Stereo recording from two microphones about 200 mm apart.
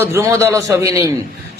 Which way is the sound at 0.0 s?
15° right (ahead or behind).